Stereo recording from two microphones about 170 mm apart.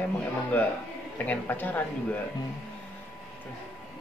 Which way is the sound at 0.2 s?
10° left (ahead or behind).